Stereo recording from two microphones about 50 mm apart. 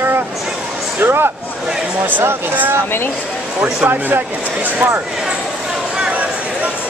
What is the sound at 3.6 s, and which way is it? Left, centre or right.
Speech, right.